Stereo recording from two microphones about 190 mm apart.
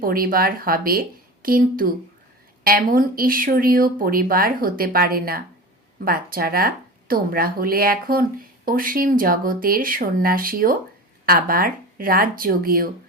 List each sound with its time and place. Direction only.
0.0 s speech: 50° right (ahead or behind)